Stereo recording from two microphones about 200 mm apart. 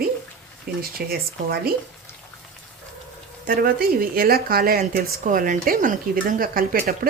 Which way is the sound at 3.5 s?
45° right (ahead or behind).